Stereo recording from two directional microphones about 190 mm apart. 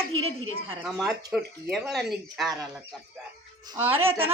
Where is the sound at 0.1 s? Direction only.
90° right.